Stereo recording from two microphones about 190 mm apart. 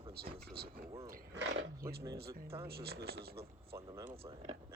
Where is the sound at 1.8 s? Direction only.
50° right (ahead or behind).